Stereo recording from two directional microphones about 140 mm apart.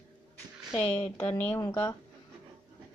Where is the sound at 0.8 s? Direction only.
15° left (ahead or behind).